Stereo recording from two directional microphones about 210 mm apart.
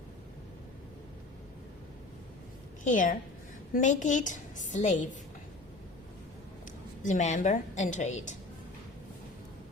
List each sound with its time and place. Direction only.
2.8 s a woman's voice: 40° left (ahead or behind)
7.0 s a woman's voice: 35° left (ahead or behind)